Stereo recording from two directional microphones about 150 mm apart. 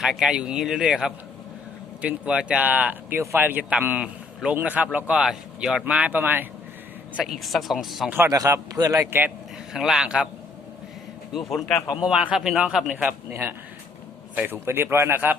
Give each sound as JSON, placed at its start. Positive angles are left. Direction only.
{"t": 0.0, "sound": "speech", "side_deg": -5}
{"t": 7.2, "sound": "speech", "side_deg": 0}
{"t": 8.1, "sound": "a man's voice", "side_deg": -20}
{"t": 11.3, "sound": "speech", "side_deg": 0}